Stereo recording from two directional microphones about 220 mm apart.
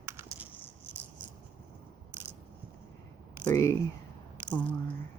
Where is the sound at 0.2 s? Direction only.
10° right (ahead or behind).